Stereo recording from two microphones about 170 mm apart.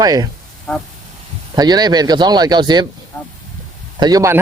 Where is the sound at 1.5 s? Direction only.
25° right (ahead or behind).